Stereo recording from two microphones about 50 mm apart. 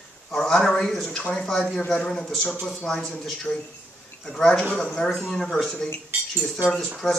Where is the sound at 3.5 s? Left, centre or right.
Left.